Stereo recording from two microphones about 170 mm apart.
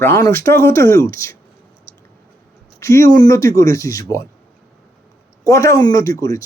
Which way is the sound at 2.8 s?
15° left (ahead or behind).